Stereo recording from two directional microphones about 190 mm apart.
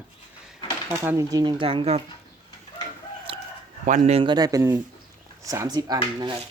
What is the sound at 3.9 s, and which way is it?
Speech, 35° right (ahead or behind).